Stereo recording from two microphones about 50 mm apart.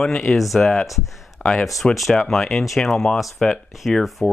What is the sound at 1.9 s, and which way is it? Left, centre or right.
Speech, centre.